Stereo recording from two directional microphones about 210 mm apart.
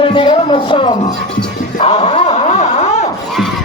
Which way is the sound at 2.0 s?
30° left (ahead or behind).